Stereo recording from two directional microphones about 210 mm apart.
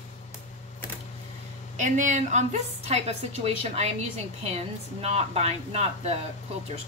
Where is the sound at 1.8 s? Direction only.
35° right (ahead or behind).